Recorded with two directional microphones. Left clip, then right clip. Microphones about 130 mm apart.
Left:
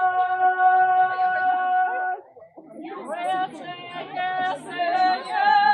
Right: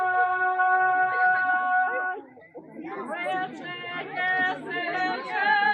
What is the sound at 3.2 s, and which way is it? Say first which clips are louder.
Female singing: left 5 dB; 30° left (ahead or behind).